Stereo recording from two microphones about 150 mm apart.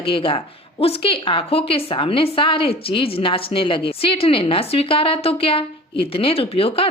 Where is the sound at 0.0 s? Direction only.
35° left (ahead or behind).